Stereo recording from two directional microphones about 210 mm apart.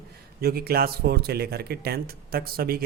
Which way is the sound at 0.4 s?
45° right (ahead or behind).